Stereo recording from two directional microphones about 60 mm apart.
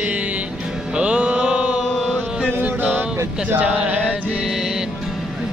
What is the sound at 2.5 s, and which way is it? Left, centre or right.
Music, right.